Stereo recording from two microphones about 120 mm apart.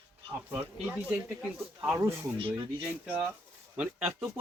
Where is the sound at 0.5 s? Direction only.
15° right (ahead or behind).